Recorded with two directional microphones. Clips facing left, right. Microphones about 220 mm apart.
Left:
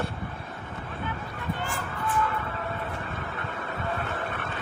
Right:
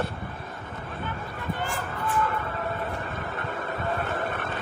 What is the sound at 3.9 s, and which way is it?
Vehicle, 40° right (ahead or behind).